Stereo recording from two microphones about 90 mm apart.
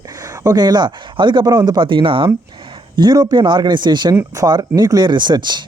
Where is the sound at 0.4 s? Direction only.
50° right (ahead or behind); by 2.3 s 75° right (ahead or behind).